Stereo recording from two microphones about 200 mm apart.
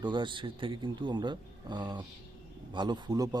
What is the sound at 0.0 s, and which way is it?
Speech, 25° right (ahead or behind).